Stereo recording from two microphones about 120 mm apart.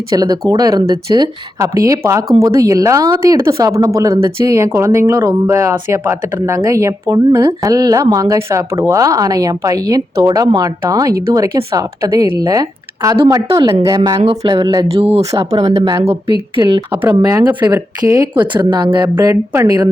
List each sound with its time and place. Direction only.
0.1 s speech: 30° right (ahead or behind)
1.5 s speech: 25° right (ahead or behind)
14.9 s speech: 55° right (ahead or behind)
16.3 s speech: 40° right (ahead or behind)
17.1 s speech: 30° right (ahead or behind)
18.3 s speech: 40° right (ahead or behind)